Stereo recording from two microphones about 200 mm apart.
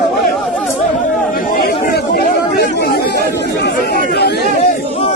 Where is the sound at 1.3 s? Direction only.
50° left (ahead or behind).